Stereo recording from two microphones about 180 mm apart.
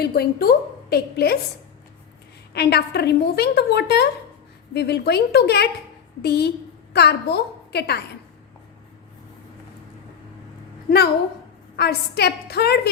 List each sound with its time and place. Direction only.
0.0 s a woman's voice: 60° left (ahead or behind)
2.5 s a woman's voice: 65° left (ahead or behind)
11.8 s a woman's voice: 65° left (ahead or behind)